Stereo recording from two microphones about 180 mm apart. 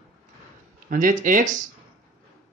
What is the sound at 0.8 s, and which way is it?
Speech, 45° right (ahead or behind).